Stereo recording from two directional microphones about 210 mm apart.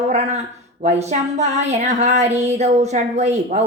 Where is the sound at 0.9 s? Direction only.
30° right (ahead or behind).